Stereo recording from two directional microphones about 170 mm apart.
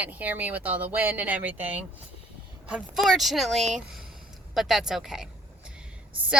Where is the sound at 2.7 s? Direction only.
Centre (ahead or behind).